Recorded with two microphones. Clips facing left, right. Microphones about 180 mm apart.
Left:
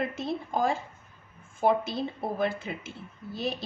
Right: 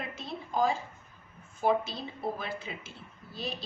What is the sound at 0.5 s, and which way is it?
A woman's voice, 55° left (ahead or behind).